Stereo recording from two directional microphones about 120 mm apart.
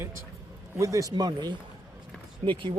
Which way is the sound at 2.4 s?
50° right (ahead or behind).